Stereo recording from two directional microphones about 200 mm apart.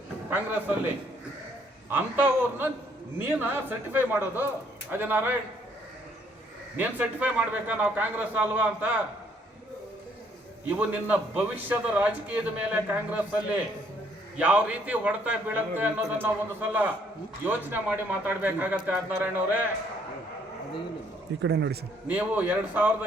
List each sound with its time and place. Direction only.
0.3 s a man's voice: 10° right (ahead or behind)
6.7 s a man's voice: 10° right (ahead or behind)
10.7 s a man's voice: 10° right (ahead or behind)
21.4 s a man's voice: 60° right (ahead or behind)
22.0 s a man's voice: 10° right (ahead or behind)